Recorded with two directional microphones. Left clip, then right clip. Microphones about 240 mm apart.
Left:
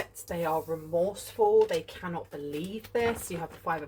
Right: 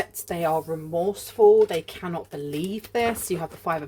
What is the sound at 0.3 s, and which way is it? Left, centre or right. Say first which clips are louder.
Speech: right 5 dB; right.